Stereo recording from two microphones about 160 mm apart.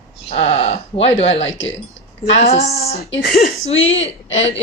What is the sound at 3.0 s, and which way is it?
Speech, 70° left (ahead or behind).